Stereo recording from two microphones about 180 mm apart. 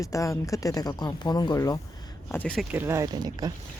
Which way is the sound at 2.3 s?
10° left (ahead or behind).